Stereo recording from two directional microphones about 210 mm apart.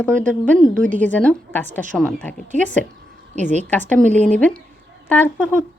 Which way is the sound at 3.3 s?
35° right (ahead or behind).